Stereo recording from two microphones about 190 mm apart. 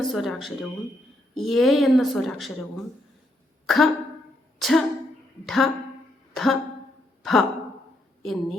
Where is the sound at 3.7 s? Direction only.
Centre (ahead or behind).